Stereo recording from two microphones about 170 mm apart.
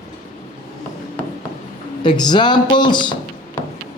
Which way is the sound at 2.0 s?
25° left (ahead or behind).